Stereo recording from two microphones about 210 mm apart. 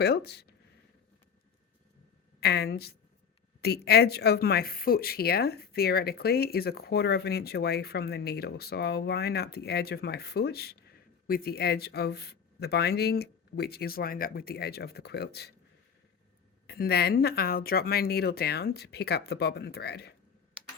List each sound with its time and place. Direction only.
0.0 s speech: 50° left (ahead or behind)
2.4 s speech: 50° left (ahead or behind)
16.6 s speech: 50° left (ahead or behind)